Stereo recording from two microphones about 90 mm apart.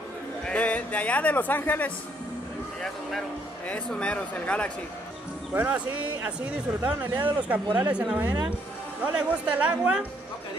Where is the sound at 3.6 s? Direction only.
15° left (ahead or behind).